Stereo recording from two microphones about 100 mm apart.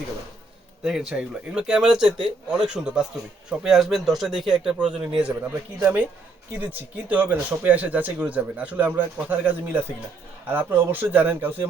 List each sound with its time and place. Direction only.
0.9 s speech: 5° right (ahead or behind)